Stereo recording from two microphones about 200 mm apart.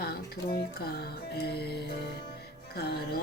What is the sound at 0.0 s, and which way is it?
Speech, 50° left (ahead or behind).